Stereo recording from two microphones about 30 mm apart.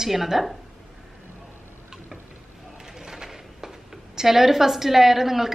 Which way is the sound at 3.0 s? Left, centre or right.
Right.